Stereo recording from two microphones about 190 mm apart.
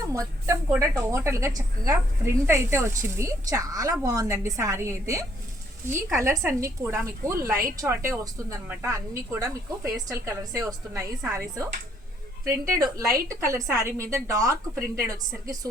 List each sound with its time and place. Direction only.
0.1 s speech: 15° right (ahead or behind)